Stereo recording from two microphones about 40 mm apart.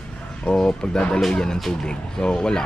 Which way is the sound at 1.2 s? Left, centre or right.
Centre.